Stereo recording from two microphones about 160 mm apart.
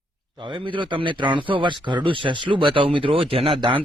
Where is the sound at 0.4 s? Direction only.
30° right (ahead or behind).